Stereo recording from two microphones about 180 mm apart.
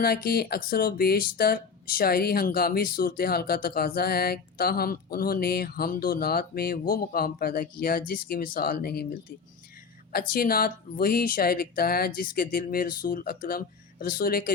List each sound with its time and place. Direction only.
0.0 s speech: 60° left (ahead or behind)
10.1 s speech: 55° left (ahead or behind)